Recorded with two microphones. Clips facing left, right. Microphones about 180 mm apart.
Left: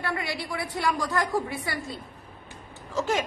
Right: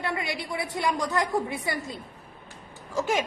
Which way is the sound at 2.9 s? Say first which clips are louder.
Even; 15° right (ahead or behind).